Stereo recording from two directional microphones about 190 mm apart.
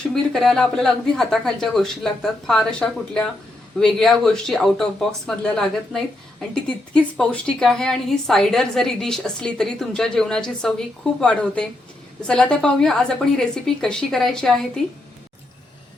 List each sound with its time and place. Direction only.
0.1 s a woman's voice: centre (ahead or behind)